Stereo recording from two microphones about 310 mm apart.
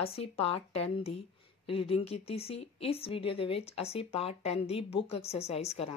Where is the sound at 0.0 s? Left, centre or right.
Centre.